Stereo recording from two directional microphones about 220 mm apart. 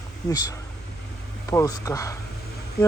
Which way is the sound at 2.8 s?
45° left (ahead or behind).